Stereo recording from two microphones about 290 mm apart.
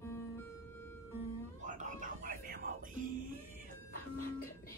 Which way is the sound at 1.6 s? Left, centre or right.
Right.